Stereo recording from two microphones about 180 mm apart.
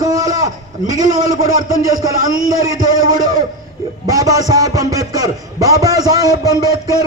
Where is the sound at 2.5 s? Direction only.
20° right (ahead or behind).